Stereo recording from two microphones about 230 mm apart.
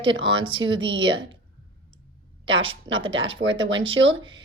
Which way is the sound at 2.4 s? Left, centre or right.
Right.